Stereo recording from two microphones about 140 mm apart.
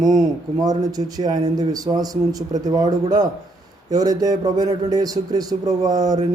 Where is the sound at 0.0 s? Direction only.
25° right (ahead or behind).